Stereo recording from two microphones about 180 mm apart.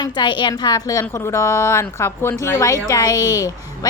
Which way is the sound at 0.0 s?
25° left (ahead or behind).